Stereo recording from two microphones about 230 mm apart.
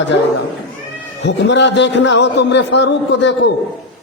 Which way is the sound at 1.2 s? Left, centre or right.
Left.